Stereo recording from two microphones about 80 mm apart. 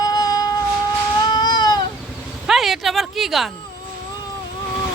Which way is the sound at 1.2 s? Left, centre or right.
Left.